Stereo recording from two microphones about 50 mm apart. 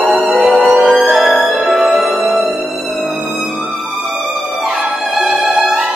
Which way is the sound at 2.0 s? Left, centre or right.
Right.